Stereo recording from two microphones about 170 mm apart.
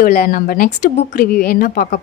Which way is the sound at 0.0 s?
60° left (ahead or behind).